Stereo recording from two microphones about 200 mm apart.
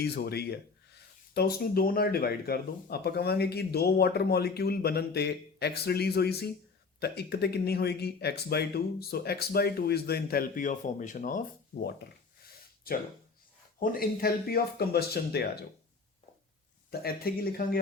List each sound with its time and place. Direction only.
0.0 s speech: 50° left (ahead or behind)
13.7 s speech: 45° left (ahead or behind)
16.9 s speech: 50° left (ahead or behind)